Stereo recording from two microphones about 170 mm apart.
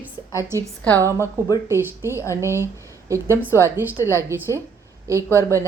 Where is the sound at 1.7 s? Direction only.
15° right (ahead or behind).